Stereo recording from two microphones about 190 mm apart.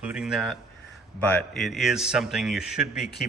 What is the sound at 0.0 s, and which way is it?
A man's voice, 5° right (ahead or behind).